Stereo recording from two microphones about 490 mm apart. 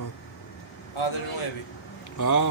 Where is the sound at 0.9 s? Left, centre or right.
Left.